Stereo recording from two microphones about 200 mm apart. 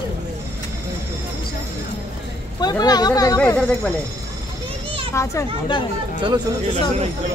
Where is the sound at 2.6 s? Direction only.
20° left (ahead or behind).